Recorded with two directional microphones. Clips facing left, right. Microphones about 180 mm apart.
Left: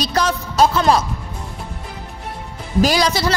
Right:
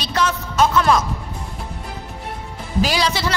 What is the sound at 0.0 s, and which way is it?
A man's voice, 40° left (ahead or behind).